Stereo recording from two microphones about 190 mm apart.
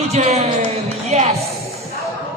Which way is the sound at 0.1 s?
35° right (ahead or behind).